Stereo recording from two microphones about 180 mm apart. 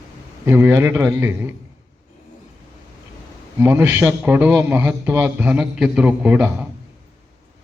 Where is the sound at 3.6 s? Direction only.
15° right (ahead or behind).